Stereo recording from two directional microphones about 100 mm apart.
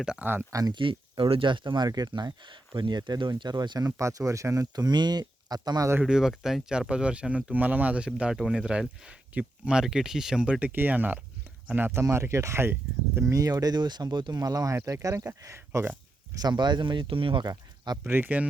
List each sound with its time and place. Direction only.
0.0 s speech: 5° right (ahead or behind)
0.5 s speech: 40° right (ahead or behind)
0.8 s speech: 60° right (ahead or behind)
3.8 s speech: 30° right (ahead or behind)
6.0 s speech: 5° right (ahead or behind)
11.9 s speech: 30° right (ahead or behind)
16.4 s speech: 45° right (ahead or behind)
17.4 s speech: 40° right (ahead or behind)
18.0 s speech: 15° right (ahead or behind)